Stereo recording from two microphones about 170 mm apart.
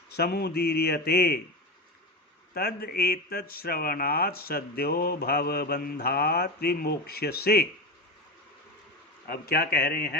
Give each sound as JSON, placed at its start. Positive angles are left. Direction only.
{"t": 0.2, "sound": "speech", "side_deg": 65}
{"t": 2.6, "sound": "speech", "side_deg": 65}
{"t": 9.2, "sound": "speech", "side_deg": 65}